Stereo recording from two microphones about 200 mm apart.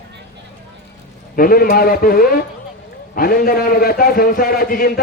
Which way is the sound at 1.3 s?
45° left (ahead or behind).